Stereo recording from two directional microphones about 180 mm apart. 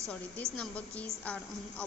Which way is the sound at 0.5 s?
5° left (ahead or behind).